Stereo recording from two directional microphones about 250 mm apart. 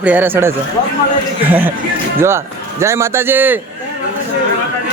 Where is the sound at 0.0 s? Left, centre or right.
Centre.